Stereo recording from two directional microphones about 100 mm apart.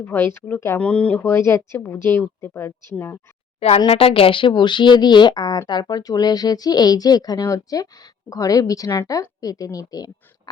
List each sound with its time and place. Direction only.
0.0 s speech: 20° left (ahead or behind)
0.8 s speech: 10° left (ahead or behind)
1.2 s speech: 25° left (ahead or behind)
3.8 s speech: 70° left (ahead or behind); by 10.5 s 40° left (ahead or behind)